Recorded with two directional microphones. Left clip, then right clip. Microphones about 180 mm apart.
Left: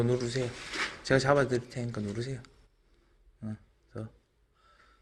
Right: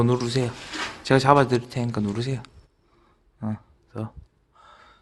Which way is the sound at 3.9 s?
20° right (ahead or behind).